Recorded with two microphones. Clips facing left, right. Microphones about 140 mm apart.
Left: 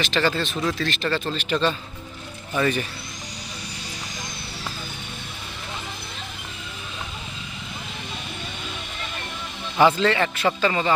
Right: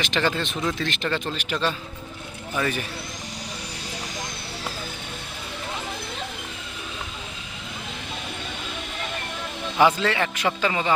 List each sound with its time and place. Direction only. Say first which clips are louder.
0.0 s a man's voice: left 2 dB; 15° right (ahead or behind)
9.7 s a man's voice: left 2 dB; 10° right (ahead or behind)